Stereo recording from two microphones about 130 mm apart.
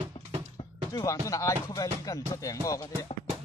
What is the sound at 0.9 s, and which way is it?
Speech, 25° left (ahead or behind).